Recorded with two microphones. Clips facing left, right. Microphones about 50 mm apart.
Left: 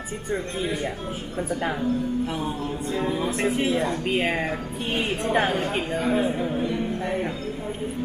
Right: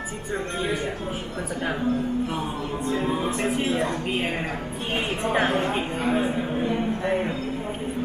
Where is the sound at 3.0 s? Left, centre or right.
Right.